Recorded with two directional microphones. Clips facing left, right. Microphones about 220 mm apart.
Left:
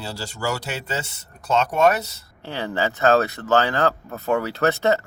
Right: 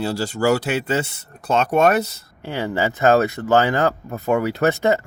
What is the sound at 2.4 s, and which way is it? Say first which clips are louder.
Speech: right 3 dB; 15° right (ahead or behind).